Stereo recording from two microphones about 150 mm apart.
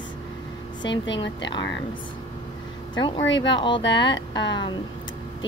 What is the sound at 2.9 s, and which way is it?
Speech, 30° left (ahead or behind).